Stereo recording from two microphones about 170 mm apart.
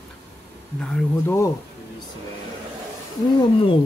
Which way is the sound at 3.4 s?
30° left (ahead or behind).